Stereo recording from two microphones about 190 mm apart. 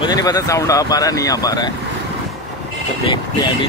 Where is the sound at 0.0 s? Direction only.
20° left (ahead or behind).